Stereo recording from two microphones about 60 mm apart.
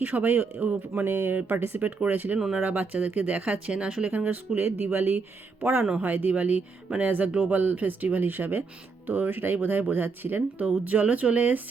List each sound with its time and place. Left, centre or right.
0.0 s speech: right
4.1 s speech: right
7.5 s speech: right